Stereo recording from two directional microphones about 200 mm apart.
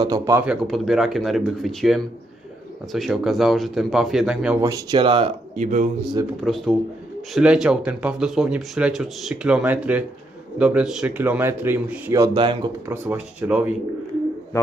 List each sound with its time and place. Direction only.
0.0 s speech: 15° right (ahead or behind)
0.7 s speech: centre (ahead or behind)
4.6 s speech: 15° right (ahead or behind); by 5.9 s 35° right (ahead or behind)
6.4 s speech: centre (ahead or behind); by 12.9 s 20° right (ahead or behind)
12.9 s speech: 10° right (ahead or behind)